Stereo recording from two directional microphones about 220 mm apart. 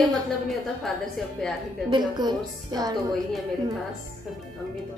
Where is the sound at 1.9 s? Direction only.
20° right (ahead or behind).